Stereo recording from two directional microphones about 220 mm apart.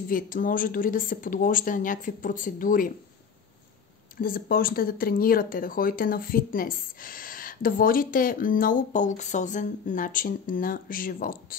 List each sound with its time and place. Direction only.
0.1 s speech: 40° left (ahead or behind)
4.2 s speech: 40° left (ahead or behind)